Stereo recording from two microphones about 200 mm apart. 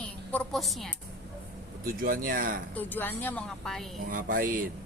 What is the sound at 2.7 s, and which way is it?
A woman's voice, 10° left (ahead or behind).